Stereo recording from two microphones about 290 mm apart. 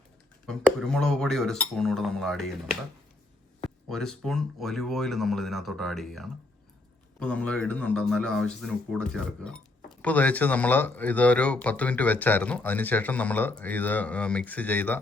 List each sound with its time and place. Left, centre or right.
0.4 s speech: centre
3.8 s speech: centre